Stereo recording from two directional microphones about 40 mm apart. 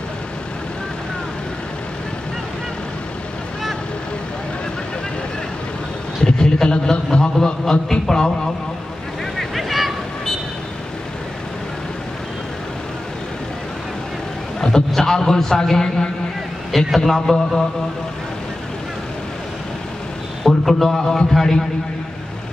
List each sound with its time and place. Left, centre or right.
6.2 s a sound: centre
7.7 s a man's voice: centre
9.4 s vehicle: centre
14.6 s a man's voice: centre
20.4 s a man's voice: centre